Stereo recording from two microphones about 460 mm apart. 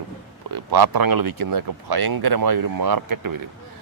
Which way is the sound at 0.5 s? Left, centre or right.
Right.